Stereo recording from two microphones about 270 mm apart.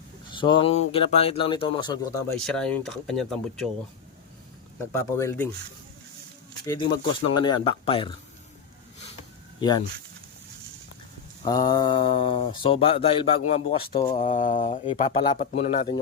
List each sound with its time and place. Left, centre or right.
0.3 s speech: centre
2.5 s speech: centre
4.9 s speech: centre
6.7 s speech: centre
9.6 s speech: centre
11.4 s speech: centre